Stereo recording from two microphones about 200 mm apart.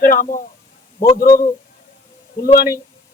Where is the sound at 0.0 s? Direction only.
45° left (ahead or behind).